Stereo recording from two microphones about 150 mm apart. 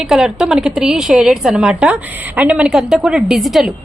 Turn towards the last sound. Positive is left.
turn(degrees=0)  # may be behind; listen again after turning